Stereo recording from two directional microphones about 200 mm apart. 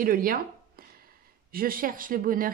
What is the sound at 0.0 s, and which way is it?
A woman's voice, 45° right (ahead or behind).